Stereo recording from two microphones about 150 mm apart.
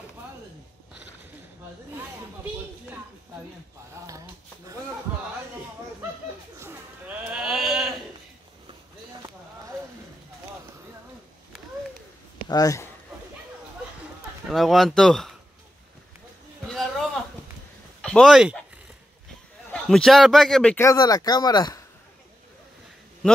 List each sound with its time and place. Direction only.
6.6 s sheep: 10° right (ahead or behind)
12.4 s speech: 25° left (ahead or behind)
14.5 s a man's voice: centre (ahead or behind)
16.6 s a sound: centre (ahead or behind)
18.0 s speech: 5° left (ahead or behind)
19.7 s a man's voice: 5° left (ahead or behind)
20.7 s speech: 20° left (ahead or behind)